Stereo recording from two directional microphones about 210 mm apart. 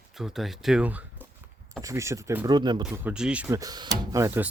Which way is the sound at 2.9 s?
5° right (ahead or behind).